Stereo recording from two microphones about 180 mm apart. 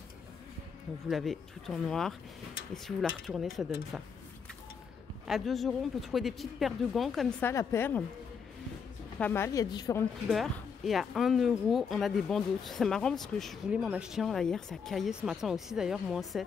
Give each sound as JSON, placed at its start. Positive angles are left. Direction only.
{"t": 1.0, "sound": "speech", "side_deg": 0}
{"t": 5.2, "sound": "speech", "side_deg": 0}
{"t": 9.2, "sound": "a woman's voice", "side_deg": 15}
{"t": 10.2, "sound": "speech", "side_deg": 0}